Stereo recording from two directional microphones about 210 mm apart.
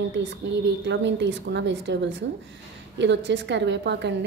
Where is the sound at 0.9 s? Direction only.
60° right (ahead or behind).